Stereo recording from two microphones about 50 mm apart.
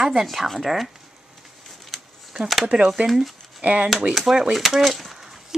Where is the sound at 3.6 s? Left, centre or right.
Right.